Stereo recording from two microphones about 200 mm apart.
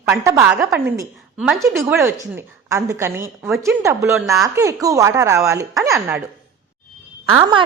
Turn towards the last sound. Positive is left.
turn(degrees=-25)  # may be behind; listen again after turning